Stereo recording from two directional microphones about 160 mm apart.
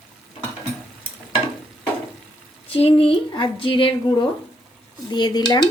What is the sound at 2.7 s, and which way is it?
A woman's voice, 35° left (ahead or behind).